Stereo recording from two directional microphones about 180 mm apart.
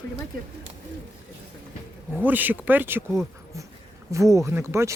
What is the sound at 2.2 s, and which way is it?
Speech, 10° right (ahead or behind).